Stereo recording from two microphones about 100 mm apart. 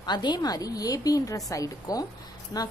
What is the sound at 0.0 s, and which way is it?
A woman's voice, 45° left (ahead or behind).